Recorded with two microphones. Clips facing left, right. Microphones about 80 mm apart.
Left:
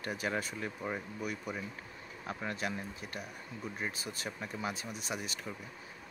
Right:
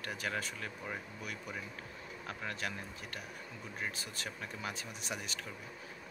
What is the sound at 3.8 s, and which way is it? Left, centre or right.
Speech, centre.